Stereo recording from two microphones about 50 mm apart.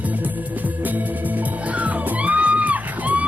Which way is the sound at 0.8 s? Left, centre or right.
Right.